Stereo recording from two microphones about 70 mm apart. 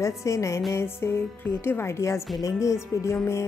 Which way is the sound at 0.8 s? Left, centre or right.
Left.